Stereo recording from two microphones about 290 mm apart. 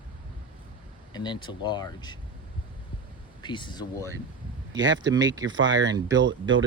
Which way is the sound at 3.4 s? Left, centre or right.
Centre.